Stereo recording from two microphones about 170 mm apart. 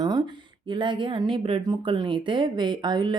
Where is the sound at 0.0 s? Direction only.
25° right (ahead or behind).